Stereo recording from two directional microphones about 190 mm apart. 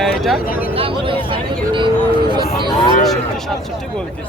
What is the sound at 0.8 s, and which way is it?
Speech, 30° right (ahead or behind).